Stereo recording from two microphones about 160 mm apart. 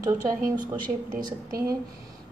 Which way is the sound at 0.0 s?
20° right (ahead or behind).